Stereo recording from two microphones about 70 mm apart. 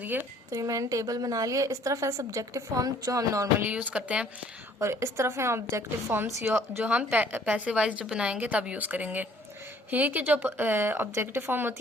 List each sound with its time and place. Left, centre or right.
0.5 s a woman's voice: right
3.6 s a woman's voice: right
4.8 s a woman's voice: right
6.5 s a woman's voice: right